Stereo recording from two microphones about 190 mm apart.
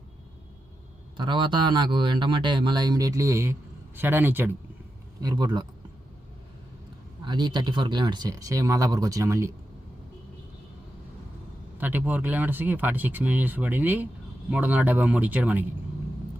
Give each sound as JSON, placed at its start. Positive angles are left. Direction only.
{"t": 1.1, "sound": "speech", "side_deg": -25}
{"t": 5.2, "sound": "speech", "side_deg": -20}
{"t": 7.3, "sound": "speech", "side_deg": -20}
{"t": 11.8, "sound": "speech", "side_deg": -10}